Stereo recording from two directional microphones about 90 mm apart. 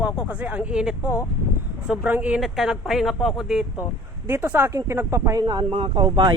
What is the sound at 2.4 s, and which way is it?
Speech, 5° right (ahead or behind).